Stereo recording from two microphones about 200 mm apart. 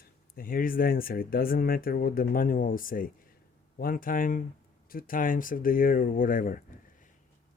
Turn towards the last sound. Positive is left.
turn(degrees=45)  # may be behind; listen again after turning